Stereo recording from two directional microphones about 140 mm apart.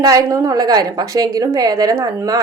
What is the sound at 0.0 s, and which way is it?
A woman's voice, 25° right (ahead or behind).